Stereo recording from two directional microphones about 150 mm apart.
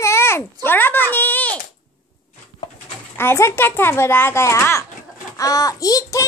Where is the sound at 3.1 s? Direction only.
15° left (ahead or behind).